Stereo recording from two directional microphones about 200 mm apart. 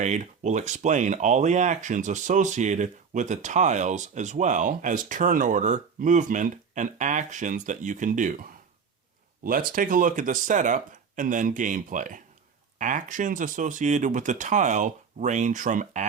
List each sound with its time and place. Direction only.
0.0 s speech: 35° right (ahead or behind)
9.4 s speech: 45° right (ahead or behind)